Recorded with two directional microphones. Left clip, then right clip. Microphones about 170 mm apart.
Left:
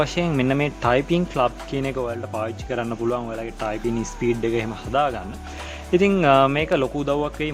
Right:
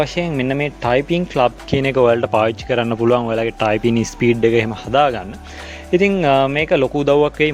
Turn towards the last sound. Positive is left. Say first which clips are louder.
# right 10 dB
turn(degrees=-45)  # may be behind; listen again after turning